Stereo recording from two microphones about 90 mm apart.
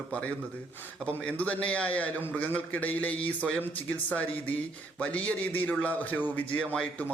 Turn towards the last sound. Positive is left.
turn(degrees=10)  # may be behind; listen again after turning